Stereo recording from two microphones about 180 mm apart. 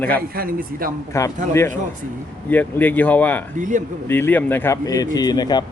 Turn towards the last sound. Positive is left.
turn(degrees=20)  # may be behind; listen again after turning